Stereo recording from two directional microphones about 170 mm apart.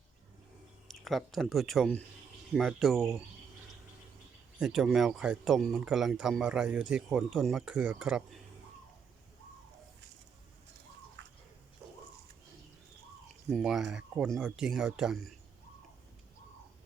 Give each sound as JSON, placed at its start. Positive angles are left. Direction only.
{"t": 0.9, "sound": "speech", "side_deg": 0}
{"t": 4.6, "sound": "speech", "side_deg": 0}
{"t": 11.2, "sound": "a sound", "side_deg": -90}
{"t": 13.5, "sound": "speech", "side_deg": -5}